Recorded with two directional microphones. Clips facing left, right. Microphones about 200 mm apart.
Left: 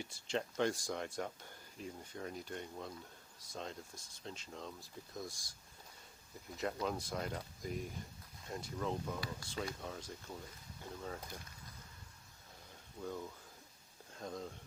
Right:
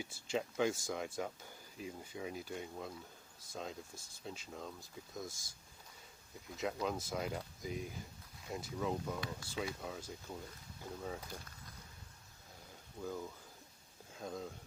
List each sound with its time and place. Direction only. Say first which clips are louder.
0.0 s speech: right 1 dB; 5° right (ahead or behind)
6.6 s speech: even; centre (ahead or behind)
13.0 s speech: right 1 dB; 5° right (ahead or behind)